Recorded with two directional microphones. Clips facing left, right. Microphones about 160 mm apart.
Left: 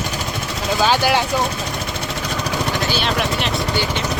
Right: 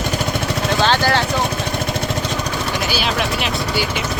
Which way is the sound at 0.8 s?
10° left (ahead or behind).